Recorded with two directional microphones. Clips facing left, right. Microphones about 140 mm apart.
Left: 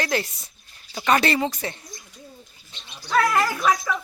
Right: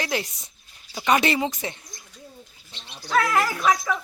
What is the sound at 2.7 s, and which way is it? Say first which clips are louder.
Dog: right 1 dB; 75° right (ahead or behind).